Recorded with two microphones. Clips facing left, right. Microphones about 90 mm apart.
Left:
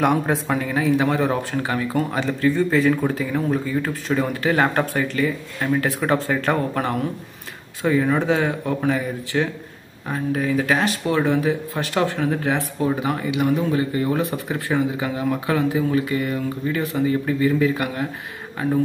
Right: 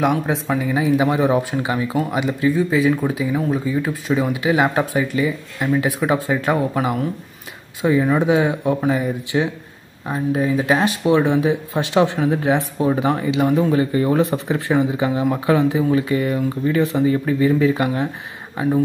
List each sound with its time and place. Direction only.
0.0 s speech: centre (ahead or behind)
0.7 s speech: 15° right (ahead or behind)